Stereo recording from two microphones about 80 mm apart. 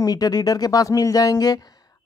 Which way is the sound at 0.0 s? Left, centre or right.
Left.